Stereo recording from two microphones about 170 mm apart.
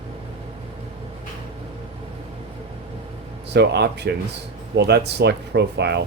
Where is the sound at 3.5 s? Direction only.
80° right.